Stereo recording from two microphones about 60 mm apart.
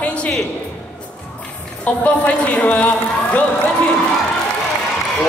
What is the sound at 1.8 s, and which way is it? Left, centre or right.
Speech, left.